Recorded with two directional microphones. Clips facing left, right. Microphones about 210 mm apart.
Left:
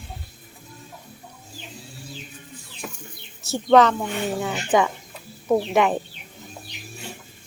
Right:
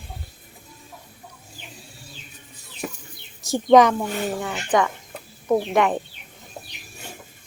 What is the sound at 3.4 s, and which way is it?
Speech, 15° right (ahead or behind).